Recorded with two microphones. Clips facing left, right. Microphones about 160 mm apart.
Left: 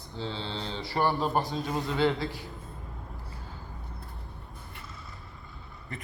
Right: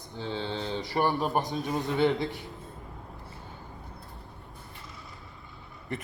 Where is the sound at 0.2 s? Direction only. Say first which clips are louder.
Right 2 dB; 15° right (ahead or behind).